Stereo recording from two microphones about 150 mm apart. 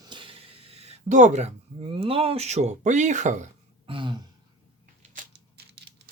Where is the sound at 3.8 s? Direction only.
35° right (ahead or behind).